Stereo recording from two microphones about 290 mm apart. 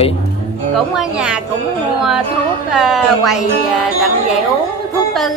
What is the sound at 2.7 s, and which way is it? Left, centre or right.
Speech, centre.